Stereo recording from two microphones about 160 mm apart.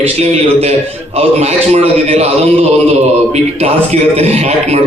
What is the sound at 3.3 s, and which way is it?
A man's voice, 40° right (ahead or behind).